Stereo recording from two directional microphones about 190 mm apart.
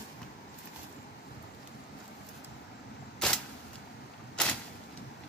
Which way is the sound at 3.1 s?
5° left (ahead or behind).